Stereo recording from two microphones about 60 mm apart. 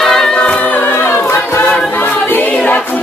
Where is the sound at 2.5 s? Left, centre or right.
Left.